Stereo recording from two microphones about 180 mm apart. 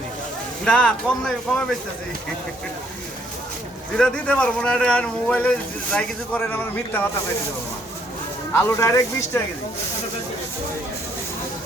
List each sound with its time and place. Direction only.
0.6 s speech: 5° left (ahead or behind)
3.9 s speech: 5° left (ahead or behind)
8.5 s speech: 15° left (ahead or behind)